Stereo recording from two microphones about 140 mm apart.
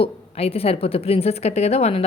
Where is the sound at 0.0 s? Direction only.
45° left (ahead or behind).